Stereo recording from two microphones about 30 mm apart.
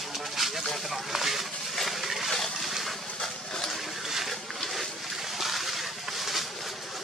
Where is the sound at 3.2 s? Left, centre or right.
Centre.